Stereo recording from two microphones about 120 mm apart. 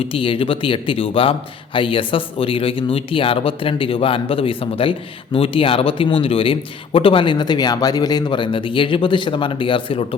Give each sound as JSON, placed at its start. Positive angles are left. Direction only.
{"t": 0.0, "sound": "speech", "side_deg": 45}